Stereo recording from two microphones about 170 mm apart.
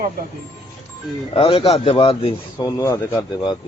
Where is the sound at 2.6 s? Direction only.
20° left (ahead or behind).